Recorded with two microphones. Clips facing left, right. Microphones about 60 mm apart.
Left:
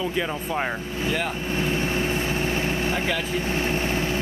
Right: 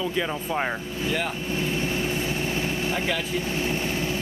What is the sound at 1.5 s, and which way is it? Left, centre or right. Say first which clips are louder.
Vehicle: left 3 dB; left.